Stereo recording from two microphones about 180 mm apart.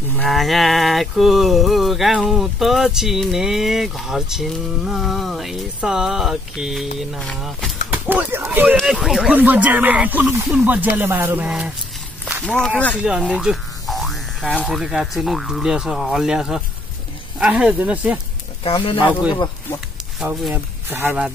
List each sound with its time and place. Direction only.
0.2 s speech: centre (ahead or behind)
12.3 s walk: 5° right (ahead or behind)
12.5 s speech: 5° left (ahead or behind)
13.0 s speech: 5° right (ahead or behind)
18.6 s speech: 30° left (ahead or behind)
19.3 s speech: 20° left (ahead or behind)
20.2 s speech: 5° right (ahead or behind)